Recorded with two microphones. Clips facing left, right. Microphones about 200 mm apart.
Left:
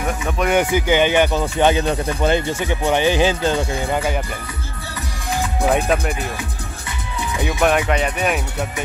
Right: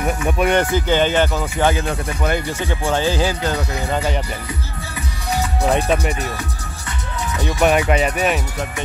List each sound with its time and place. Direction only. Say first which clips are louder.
0.5 s speech: left 2 dB; 10° left (ahead or behind)
3.9 s speech: right 1 dB; 10° left (ahead or behind)
5.6 s speech: even; centre (ahead or behind)
7.3 s speech: left 1 dB; 10° left (ahead or behind)
7.6 s speech: right 2 dB; 5° right (ahead or behind)